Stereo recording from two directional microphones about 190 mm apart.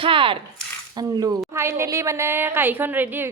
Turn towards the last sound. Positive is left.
turn(degrees=-10)  # may be behind; listen again after turning